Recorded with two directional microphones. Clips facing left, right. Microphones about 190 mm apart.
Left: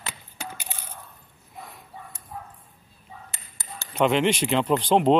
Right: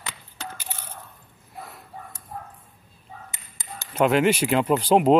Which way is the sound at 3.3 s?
20° right (ahead or behind).